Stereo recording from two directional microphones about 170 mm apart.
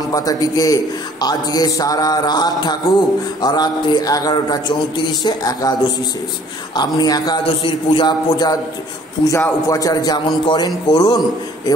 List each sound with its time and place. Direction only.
0.1 s a man's voice: 20° left (ahead or behind)